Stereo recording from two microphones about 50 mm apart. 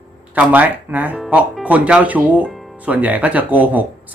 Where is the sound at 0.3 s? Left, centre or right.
Right.